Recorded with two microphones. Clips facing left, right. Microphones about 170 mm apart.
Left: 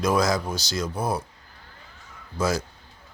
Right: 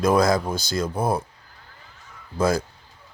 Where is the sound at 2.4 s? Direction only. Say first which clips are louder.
Right 4 dB; 55° right (ahead or behind).